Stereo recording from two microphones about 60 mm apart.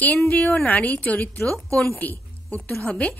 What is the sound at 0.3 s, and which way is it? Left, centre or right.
A woman's voice, left.